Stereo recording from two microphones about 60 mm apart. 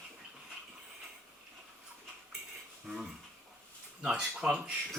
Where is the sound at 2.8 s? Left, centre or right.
Centre.